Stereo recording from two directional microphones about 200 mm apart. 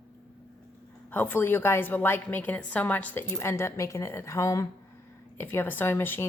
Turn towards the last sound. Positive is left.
turn(degrees=10)  # may be behind; listen again after turning